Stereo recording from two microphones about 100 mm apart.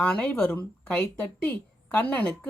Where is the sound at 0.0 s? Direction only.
15° left (ahead or behind).